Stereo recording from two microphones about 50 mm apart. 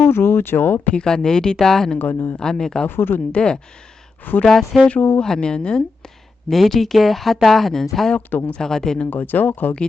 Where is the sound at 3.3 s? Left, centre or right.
Centre.